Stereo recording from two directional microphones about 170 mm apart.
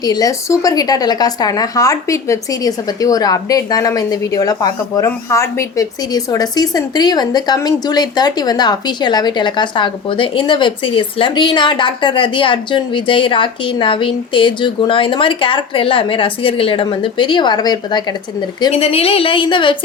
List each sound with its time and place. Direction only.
0.0 s speech: 20° left (ahead or behind)
18.7 s a woman's voice: 35° left (ahead or behind)